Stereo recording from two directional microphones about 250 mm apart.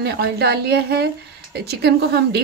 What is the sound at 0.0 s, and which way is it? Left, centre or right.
A woman's voice, right.